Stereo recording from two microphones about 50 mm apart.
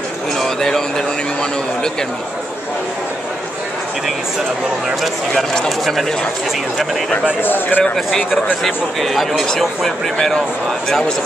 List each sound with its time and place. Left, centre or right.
0.4 s a sound: centre
7.4 s speech: left
7.8 s a man's voice: centre